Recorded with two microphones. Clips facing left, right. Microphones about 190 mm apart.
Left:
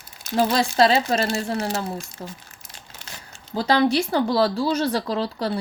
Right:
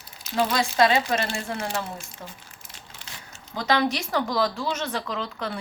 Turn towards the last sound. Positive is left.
turn(degrees=35)  # may be behind; listen again after turning